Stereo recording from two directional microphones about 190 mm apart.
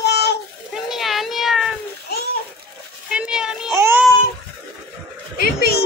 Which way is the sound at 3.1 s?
5° right (ahead or behind).